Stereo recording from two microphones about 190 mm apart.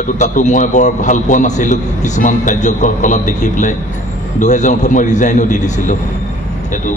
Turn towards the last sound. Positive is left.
turn(degrees=40)  # may be behind; listen again after turning